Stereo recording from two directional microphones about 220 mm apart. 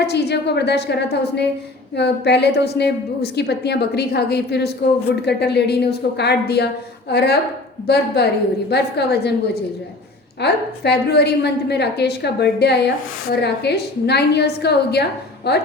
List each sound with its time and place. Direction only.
0.0 s a woman's voice: 50° left (ahead or behind)
10.4 s a woman's voice: 50° left (ahead or behind)